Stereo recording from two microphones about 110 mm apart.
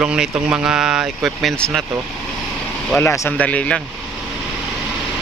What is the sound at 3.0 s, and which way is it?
Speech, 20° left (ahead or behind).